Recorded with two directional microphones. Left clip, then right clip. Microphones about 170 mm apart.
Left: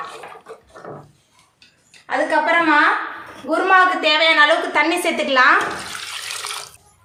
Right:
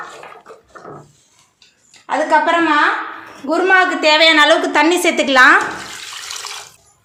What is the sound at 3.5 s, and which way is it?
A woman's voice, 30° right (ahead or behind).